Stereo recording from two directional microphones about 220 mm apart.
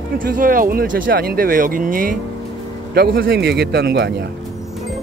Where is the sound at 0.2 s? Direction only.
40° right (ahead or behind).